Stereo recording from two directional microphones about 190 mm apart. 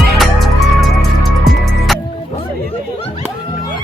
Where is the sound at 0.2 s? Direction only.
Centre (ahead or behind).